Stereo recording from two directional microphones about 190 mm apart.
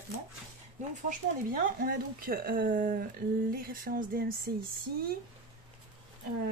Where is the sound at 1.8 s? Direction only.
50° right (ahead or behind).